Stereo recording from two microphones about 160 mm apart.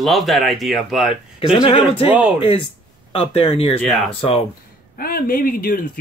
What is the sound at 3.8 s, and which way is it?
Speech, centre (ahead or behind).